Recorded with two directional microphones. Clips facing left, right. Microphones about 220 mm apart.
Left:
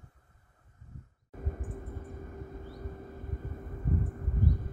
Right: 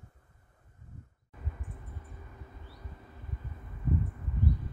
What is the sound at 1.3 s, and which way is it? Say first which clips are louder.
Vehicle: left 7 dB; 45° left (ahead or behind).